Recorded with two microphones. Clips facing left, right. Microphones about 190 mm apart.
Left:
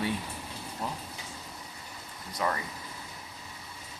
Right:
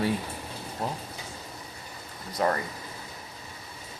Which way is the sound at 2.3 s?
45° right (ahead or behind).